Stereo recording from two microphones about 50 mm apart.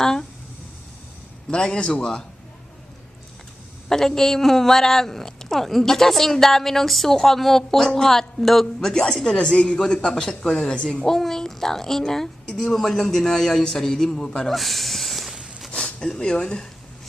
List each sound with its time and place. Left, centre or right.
0.0 s speech: centre
1.5 s a man's voice: centre
3.8 s a man's voice: centre
14.5 s snake: centre
16.0 s a man's voice: centre